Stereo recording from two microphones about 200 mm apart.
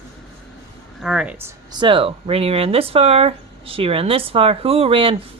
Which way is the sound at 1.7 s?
25° right (ahead or behind).